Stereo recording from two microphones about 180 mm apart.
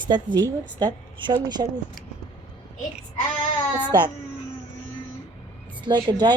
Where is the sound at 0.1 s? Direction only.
25° right (ahead or behind).